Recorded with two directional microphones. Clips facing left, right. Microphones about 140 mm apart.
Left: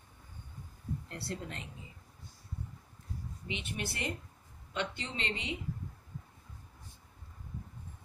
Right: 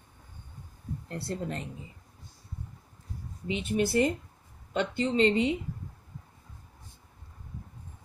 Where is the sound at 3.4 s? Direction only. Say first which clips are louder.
Right 12 dB; 40° right (ahead or behind).